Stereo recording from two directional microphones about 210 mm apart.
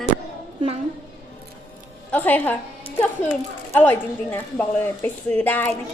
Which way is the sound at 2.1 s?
10° left (ahead or behind).